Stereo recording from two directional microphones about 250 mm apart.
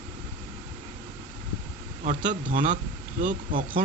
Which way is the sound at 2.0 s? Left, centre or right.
Right.